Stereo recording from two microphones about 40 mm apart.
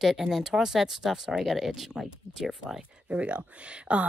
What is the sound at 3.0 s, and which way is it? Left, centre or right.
Speech, right.